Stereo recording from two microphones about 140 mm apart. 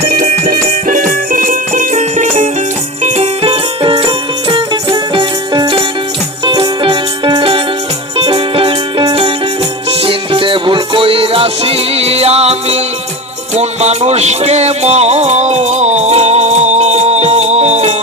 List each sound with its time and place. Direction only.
0.1 s music: 90° right; by 2.5 s 55° right (ahead or behind)
3.0 s music: 45° right (ahead or behind)